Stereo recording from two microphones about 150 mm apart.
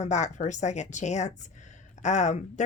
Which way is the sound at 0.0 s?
50° left (ahead or behind).